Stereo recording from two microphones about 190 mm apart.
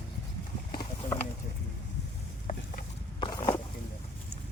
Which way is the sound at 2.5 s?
45° left (ahead or behind).